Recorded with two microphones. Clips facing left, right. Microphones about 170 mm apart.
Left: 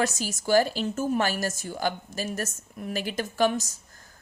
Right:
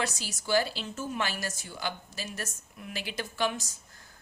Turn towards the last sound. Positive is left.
turn(degrees=45)  # may be behind; listen again after turning